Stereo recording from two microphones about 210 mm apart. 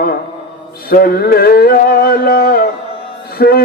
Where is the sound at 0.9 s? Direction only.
45° left (ahead or behind).